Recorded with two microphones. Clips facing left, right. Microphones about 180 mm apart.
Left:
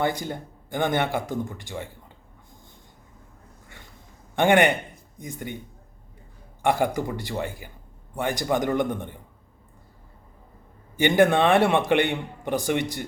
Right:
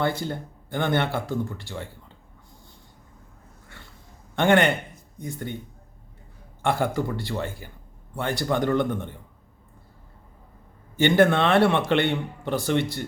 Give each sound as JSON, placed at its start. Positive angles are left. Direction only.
{"t": 0.0, "sound": "speech", "side_deg": 15}
{"t": 4.4, "sound": "speech", "side_deg": 15}
{"t": 6.6, "sound": "speech", "side_deg": 15}
{"t": 11.0, "sound": "speech", "side_deg": 15}